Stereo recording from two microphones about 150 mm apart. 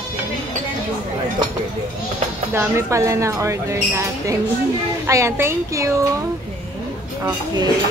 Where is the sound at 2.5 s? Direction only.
20° right (ahead or behind).